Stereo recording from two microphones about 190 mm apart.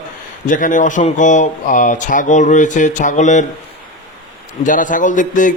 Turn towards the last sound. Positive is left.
turn(degrees=40)  # may be behind; listen again after turning